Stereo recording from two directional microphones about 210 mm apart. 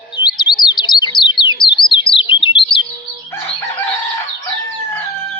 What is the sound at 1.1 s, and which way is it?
Bird, 20° left (ahead or behind).